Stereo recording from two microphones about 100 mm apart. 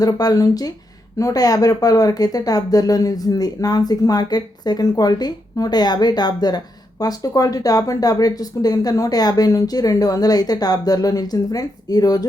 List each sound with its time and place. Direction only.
0.0 s speech: 40° left (ahead or behind)